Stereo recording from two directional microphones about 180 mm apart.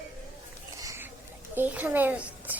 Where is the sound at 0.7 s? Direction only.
15° right (ahead or behind).